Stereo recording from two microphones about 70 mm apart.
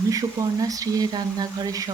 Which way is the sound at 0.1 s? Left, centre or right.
Right.